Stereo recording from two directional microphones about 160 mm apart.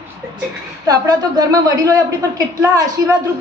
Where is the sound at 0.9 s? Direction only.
25° right (ahead or behind).